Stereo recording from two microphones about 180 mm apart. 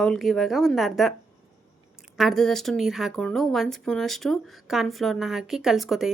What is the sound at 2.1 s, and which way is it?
Speech, centre (ahead or behind).